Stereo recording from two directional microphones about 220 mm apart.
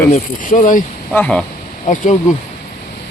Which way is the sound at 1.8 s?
35° left (ahead or behind).